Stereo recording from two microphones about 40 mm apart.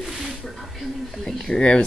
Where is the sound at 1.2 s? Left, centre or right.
Centre.